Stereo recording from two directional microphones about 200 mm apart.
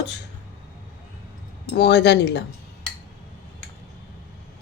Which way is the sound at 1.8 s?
60° left (ahead or behind).